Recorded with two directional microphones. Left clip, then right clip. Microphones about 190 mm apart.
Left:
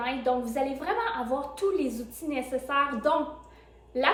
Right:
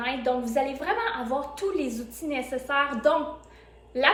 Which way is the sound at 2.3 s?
25° left (ahead or behind).